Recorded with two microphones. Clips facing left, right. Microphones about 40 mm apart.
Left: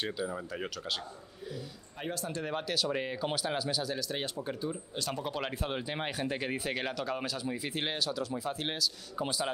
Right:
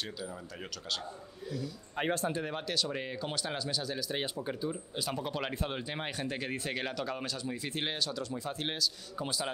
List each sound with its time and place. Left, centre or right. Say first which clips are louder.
0.0 s speech: left 5 dB; left
2.0 s speech: right 6 dB; right
2.4 s speech: left 2 dB; centre